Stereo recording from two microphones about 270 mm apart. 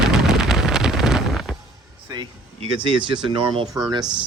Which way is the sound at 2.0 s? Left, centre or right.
Centre.